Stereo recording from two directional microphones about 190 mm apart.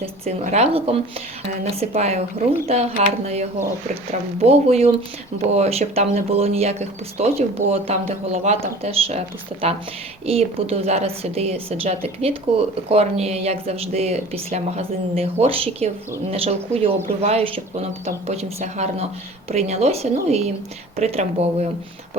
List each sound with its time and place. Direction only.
0.0 s a woman's voice: 35° right (ahead or behind)
4.4 s a woman's voice: 35° right (ahead or behind)